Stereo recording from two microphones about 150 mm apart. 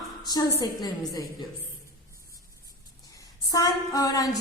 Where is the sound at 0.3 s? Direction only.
25° left (ahead or behind).